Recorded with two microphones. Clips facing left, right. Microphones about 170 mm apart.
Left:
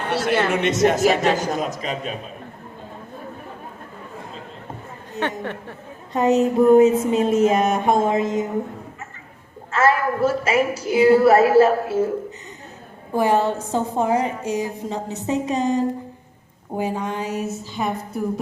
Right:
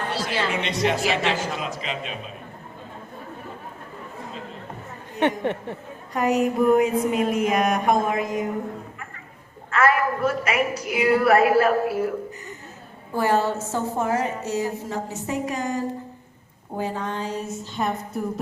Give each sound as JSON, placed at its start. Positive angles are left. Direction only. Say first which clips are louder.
{"t": 0.1, "sound": "a man's voice", "louder": "left 9 dB", "side_deg": 60}
{"t": 5.4, "sound": "speech", "louder": "right 4 dB", "side_deg": -20}
{"t": 6.1, "sound": "a woman's voice", "louder": "left 4 dB", "side_deg": 25}
{"t": 9.7, "sound": "a woman's voice", "louder": "left 2 dB", "side_deg": 30}
{"t": 13.1, "sound": "a woman's voice", "louder": "left 3 dB", "side_deg": 15}